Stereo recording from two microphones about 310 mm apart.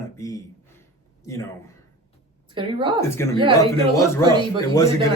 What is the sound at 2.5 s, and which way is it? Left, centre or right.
Speech, centre.